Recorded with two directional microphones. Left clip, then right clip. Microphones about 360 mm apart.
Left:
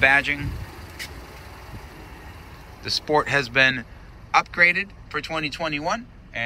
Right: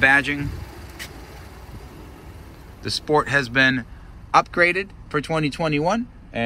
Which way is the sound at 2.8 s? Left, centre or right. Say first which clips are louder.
Right 1 dB; centre.